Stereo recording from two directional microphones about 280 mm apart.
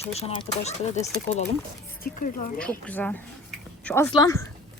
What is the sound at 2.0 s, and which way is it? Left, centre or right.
Speech, left.